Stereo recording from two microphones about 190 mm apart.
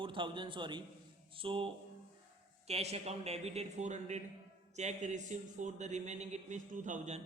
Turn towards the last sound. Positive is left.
turn(degrees=-40)  # may be behind; listen again after turning